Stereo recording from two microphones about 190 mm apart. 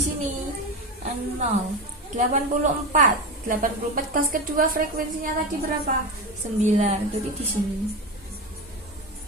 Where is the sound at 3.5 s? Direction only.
45° right (ahead or behind).